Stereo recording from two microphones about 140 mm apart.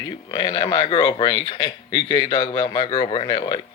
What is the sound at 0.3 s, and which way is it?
A man's voice, 35° left (ahead or behind).